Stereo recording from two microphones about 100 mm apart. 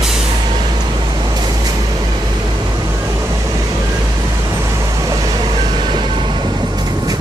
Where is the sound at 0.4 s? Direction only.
50° right (ahead or behind).